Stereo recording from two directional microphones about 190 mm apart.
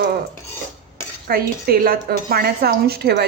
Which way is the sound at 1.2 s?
50° right (ahead or behind).